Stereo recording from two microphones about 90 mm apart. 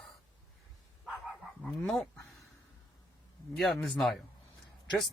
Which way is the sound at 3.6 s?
5° left (ahead or behind).